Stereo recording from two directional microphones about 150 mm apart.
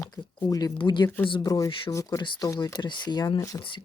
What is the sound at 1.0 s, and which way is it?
Speech, 10° left (ahead or behind).